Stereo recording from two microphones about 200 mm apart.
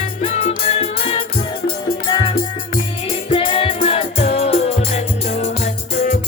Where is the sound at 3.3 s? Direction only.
25° left (ahead or behind).